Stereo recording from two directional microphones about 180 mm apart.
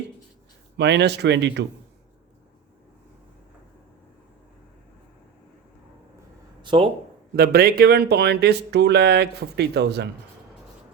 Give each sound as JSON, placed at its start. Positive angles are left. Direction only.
{"t": 0.8, "sound": "speech", "side_deg": -75}
{"t": 6.6, "sound": "a sound", "side_deg": -30}
{"t": 7.3, "sound": "speech", "side_deg": -60}